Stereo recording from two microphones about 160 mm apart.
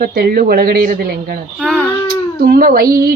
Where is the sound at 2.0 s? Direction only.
70° right (ahead or behind).